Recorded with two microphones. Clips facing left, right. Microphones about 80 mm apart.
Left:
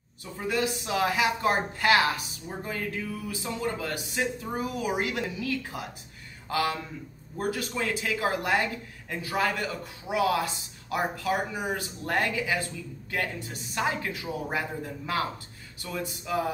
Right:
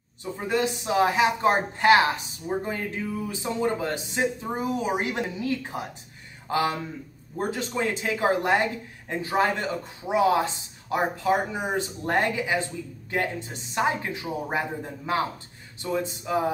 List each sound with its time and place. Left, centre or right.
0.2 s a woman's voice: right